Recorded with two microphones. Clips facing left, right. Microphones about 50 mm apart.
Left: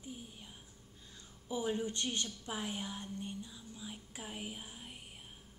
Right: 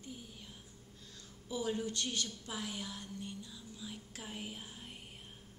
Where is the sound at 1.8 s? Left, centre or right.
Left; by 5.0 s centre.